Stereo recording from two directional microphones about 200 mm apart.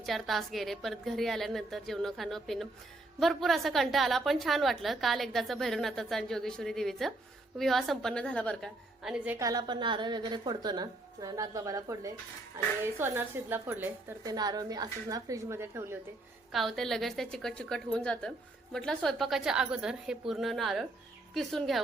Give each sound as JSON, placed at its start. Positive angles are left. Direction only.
{"t": 0.0, "sound": "a woman's voice", "side_deg": 0}
{"t": 16.5, "sound": "a woman's voice", "side_deg": 0}